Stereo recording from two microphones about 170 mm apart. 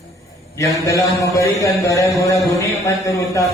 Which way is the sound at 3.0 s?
20° left (ahead or behind).